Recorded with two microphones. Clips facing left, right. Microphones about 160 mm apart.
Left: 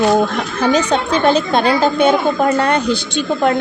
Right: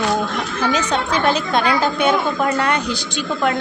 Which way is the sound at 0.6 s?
35° left (ahead or behind).